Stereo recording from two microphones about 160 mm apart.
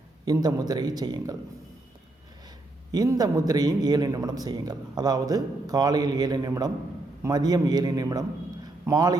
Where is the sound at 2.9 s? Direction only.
20° right (ahead or behind).